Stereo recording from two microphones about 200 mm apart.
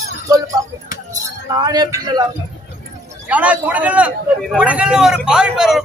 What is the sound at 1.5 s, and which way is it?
Speech, 20° right (ahead or behind).